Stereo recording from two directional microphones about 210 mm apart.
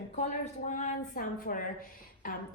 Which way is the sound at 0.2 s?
35° left (ahead or behind).